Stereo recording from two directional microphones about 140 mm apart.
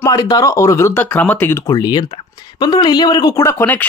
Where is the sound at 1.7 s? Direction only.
30° left (ahead or behind).